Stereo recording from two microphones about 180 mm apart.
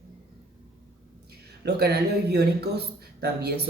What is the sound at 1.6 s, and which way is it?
A man's voice, 65° right (ahead or behind).